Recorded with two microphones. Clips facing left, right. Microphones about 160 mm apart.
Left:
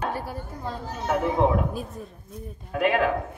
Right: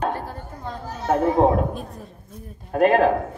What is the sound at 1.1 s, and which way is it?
Speech, 40° right (ahead or behind).